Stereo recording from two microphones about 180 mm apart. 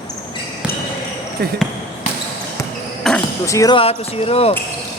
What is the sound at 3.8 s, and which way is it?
Speech, 35° left (ahead or behind).